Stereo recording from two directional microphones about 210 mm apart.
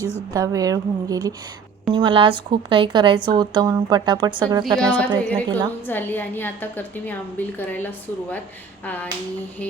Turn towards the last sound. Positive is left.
turn(degrees=10)  # may be behind; listen again after turning